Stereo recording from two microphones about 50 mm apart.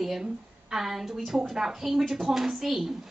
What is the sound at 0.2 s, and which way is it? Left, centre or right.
A woman's voice, centre.